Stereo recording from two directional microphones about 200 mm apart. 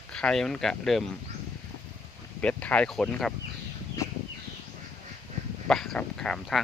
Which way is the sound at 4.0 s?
15° left (ahead or behind).